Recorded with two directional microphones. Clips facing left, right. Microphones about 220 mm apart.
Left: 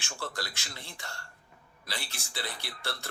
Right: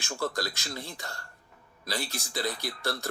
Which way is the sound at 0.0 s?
40° right (ahead or behind).